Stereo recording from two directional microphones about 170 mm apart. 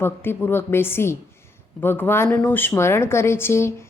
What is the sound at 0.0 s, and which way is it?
A woman's voice, 15° left (ahead or behind).